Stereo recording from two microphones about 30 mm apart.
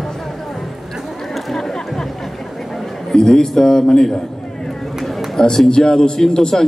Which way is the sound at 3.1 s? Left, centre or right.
Left.